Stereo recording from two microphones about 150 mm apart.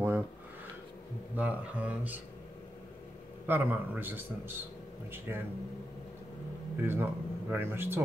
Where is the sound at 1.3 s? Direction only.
10° right (ahead or behind).